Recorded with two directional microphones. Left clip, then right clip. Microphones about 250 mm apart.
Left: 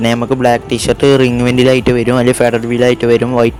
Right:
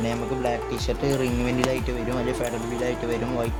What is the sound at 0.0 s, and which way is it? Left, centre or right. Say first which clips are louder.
Speech: left 14 dB; right.